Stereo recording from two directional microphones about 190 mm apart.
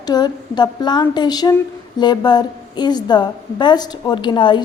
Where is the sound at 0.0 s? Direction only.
20° left (ahead or behind).